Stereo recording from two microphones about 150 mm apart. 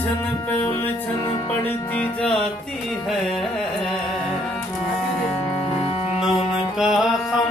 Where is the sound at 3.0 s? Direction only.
Centre (ahead or behind).